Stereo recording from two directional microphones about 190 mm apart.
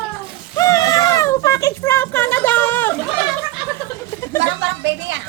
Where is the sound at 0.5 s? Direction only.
15° left (ahead or behind).